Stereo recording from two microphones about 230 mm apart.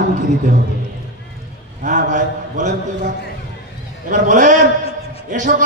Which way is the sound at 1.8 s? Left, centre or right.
Right.